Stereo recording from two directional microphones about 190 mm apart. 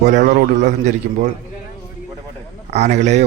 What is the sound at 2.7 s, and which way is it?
Speech, 35° right (ahead or behind).